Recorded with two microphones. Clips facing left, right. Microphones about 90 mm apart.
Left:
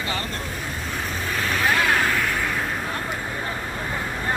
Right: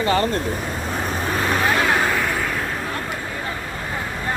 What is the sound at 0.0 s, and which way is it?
Speech, 40° right (ahead or behind).